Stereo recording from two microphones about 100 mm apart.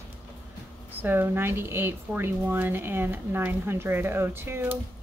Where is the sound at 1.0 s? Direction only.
20° right (ahead or behind).